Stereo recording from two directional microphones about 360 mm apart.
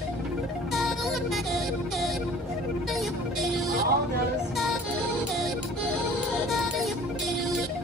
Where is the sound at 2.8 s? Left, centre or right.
Centre.